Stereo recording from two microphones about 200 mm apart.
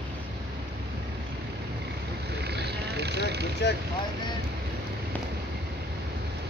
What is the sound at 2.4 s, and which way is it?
Vehicle, 55° right (ahead or behind).